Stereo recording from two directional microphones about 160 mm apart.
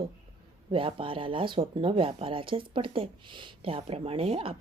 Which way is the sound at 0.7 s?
35° right (ahead or behind).